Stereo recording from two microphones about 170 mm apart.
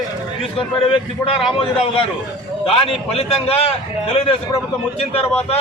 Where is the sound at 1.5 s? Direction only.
35° left (ahead or behind).